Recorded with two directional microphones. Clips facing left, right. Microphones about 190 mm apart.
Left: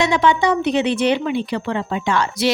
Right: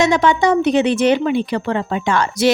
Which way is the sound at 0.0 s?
45° right (ahead or behind).